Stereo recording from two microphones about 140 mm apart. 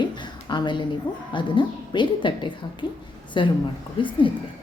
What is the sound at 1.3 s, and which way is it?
A woman's voice, 35° left (ahead or behind).